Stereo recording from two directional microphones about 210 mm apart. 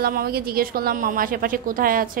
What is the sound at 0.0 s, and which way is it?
A woman's voice, 45° right (ahead or behind).